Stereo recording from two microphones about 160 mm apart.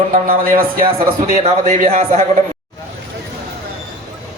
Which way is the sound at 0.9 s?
40° right (ahead or behind).